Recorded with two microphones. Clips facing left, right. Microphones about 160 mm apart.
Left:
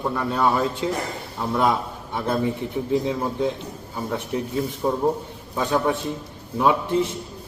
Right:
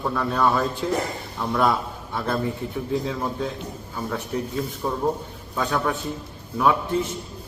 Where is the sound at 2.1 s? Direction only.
20° left (ahead or behind).